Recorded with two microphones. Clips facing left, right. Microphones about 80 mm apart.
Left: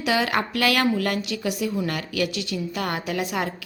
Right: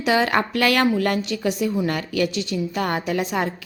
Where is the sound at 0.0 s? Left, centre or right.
Right.